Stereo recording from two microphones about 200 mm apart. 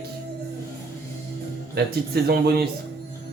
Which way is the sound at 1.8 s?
55° right (ahead or behind).